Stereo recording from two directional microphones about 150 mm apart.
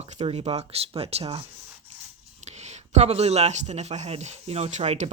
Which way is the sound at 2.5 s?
50° right (ahead or behind).